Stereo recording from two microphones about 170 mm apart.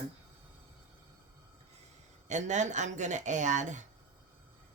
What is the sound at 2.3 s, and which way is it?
Speech, 45° right (ahead or behind).